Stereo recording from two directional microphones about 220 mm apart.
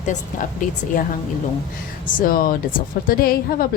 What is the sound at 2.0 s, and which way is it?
A woman's voice, 40° left (ahead or behind).